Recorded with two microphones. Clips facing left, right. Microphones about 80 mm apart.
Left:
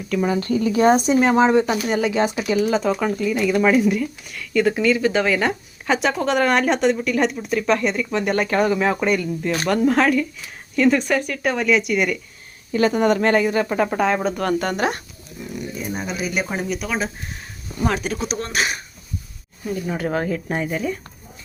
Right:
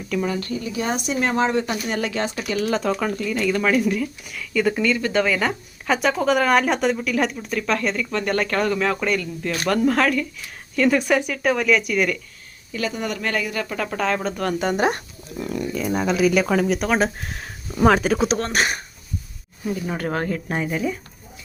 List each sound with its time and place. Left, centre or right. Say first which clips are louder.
0.2 s speech: left 6 dB; left
1.1 s speech: left 5 dB; centre
1.8 s a woman's voice: left 5 dB; centre
9.6 s a woman's voice: left 1 dB; centre
10.8 s a woman's voice: left 1 dB; centre
12.9 s speech: left 9 dB; left; by 14.3 s centre
14.3 s a woman's voice: left 1 dB; centre
14.8 s speech: right 1 dB; right
15.4 s speech: right 4 dB; right
17.7 s speech: right 6 dB; right
18.3 s speech: right 1 dB; right
19.6 s a woman's voice: left 1 dB; centre